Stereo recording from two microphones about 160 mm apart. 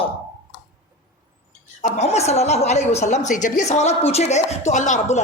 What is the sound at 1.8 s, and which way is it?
A woman's voice, 45° left (ahead or behind).